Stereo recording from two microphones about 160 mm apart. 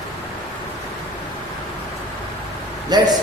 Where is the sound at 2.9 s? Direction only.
25° right (ahead or behind).